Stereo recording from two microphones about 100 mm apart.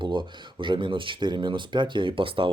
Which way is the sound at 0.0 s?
55° right (ahead or behind).